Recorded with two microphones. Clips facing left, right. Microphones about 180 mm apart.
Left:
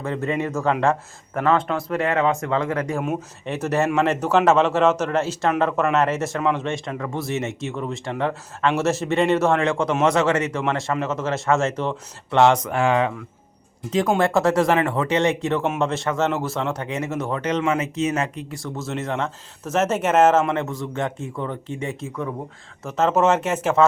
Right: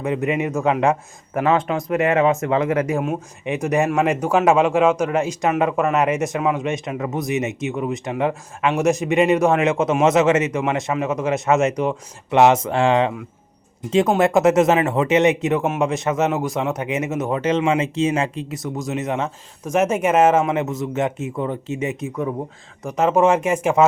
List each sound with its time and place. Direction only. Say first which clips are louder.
0.0 s speech: right 3 dB; 15° right (ahead or behind)
14.2 s speech: right 4 dB; 20° right (ahead or behind)